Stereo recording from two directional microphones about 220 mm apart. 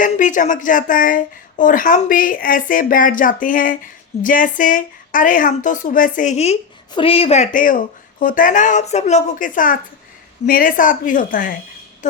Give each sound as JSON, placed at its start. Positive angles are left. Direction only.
{"t": 0.0, "sound": "speech", "side_deg": 35}